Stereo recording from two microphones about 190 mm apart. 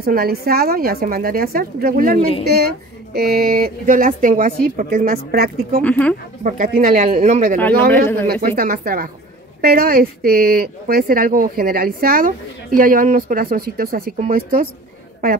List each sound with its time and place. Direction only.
0.0 s speech: 55° right (ahead or behind)
2.1 s a woman's voice: 30° left (ahead or behind)
2.4 s speech: 55° right (ahead or behind)
5.8 s speech: 5° left (ahead or behind)
6.4 s speech: 45° right (ahead or behind)
7.5 s speech: 10° left (ahead or behind)
8.3 s speech: 50° right (ahead or behind)